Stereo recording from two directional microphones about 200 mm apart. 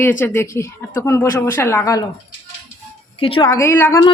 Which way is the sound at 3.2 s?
25° left (ahead or behind).